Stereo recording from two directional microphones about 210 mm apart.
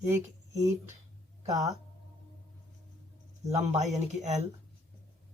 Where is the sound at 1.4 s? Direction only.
15° right (ahead or behind).